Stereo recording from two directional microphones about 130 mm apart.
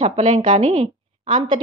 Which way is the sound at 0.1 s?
40° right (ahead or behind).